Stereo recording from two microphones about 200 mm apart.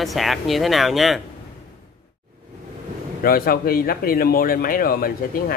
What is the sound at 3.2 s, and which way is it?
Speech, 50° left (ahead or behind).